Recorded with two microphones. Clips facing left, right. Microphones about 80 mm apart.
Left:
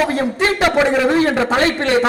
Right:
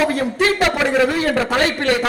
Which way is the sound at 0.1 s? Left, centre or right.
Left.